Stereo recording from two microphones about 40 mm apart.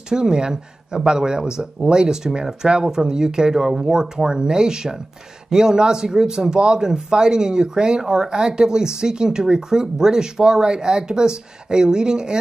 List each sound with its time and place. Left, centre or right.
0.1 s speech: centre